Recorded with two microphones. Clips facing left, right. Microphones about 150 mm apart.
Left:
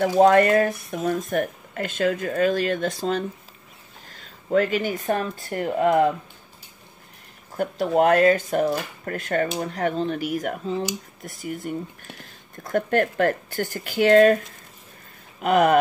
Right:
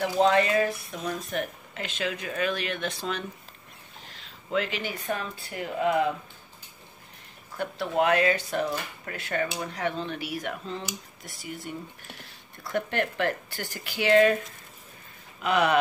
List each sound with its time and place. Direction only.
0.0 s speech: 50° left (ahead or behind)
7.5 s speech: 45° left (ahead or behind)
15.4 s speech: 45° left (ahead or behind)